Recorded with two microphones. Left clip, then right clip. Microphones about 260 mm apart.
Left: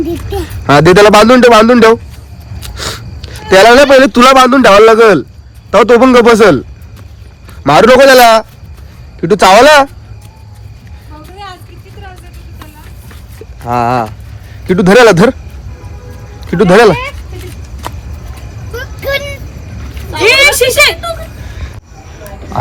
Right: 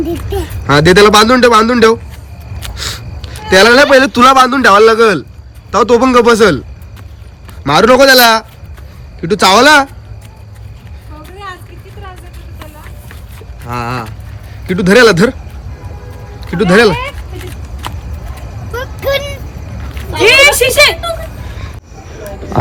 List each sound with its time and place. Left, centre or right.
0.0 s a man's voice: centre
2.6 s a sound: centre
4.0 s a man's voice: centre
7.6 s a man's voice: centre
13.7 s a man's voice: centre
16.4 s speech: centre
17.8 s horse: centre
18.8 s a sound: centre
20.1 s a child's voice: right